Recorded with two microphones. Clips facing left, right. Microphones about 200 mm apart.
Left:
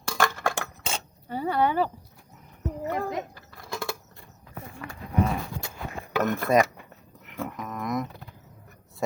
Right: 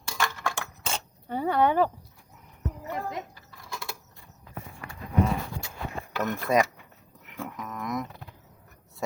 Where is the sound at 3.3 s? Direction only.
65° left (ahead or behind).